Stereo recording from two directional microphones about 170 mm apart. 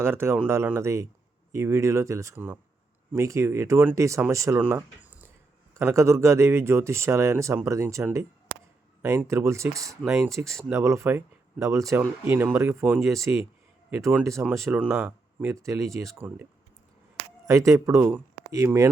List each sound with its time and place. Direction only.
0.0 s speech: 15° right (ahead or behind)
5.8 s speech: 15° right (ahead or behind)
10.2 s speech: centre (ahead or behind)
10.6 s speech: 15° right (ahead or behind)